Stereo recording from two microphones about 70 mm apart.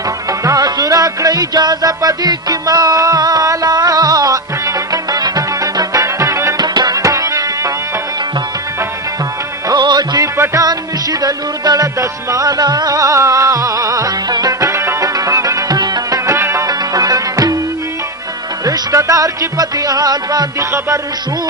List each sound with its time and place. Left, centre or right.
0.3 s music: right
6.6 s music: right
7.0 s music: right
9.6 s music: right
10.3 s music: right
10.7 s music: right
16.6 s music: right
18.6 s music: right